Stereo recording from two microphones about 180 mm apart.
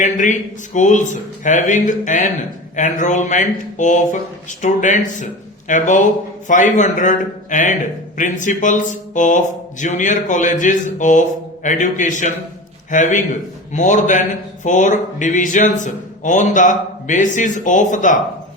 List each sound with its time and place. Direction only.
0.0 s speech: 45° left (ahead or behind)